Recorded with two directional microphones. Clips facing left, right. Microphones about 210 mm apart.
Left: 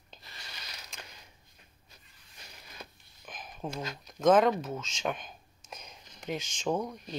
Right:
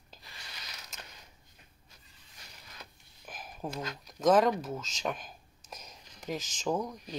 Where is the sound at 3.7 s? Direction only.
Centre (ahead or behind).